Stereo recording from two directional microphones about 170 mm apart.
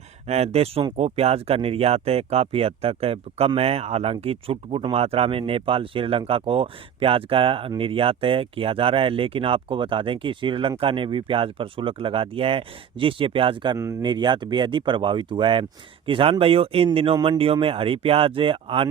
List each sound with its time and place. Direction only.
0.3 s speech: 40° right (ahead or behind)